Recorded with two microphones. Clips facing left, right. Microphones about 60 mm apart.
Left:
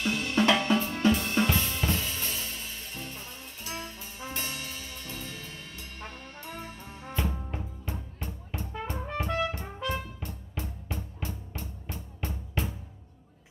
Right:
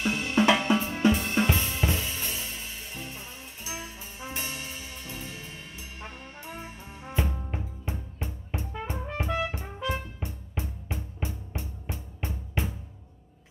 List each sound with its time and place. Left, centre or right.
0.0 s drum kit: centre
7.2 s music: centre
7.5 s music: centre